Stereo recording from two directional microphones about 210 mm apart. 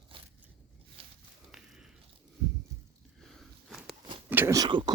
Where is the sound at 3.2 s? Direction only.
Centre (ahead or behind).